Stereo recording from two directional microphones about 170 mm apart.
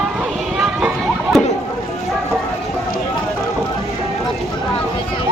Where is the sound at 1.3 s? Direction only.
Centre (ahead or behind).